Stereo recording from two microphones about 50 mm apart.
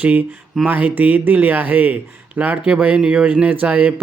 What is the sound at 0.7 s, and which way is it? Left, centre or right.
Speech, right.